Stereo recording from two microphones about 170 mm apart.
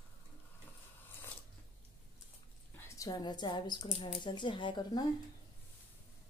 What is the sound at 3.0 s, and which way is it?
A woman's voice, 25° left (ahead or behind).